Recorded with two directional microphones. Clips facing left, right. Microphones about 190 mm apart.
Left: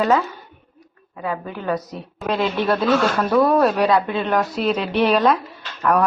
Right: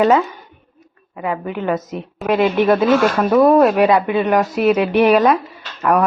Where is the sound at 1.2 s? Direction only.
20° right (ahead or behind).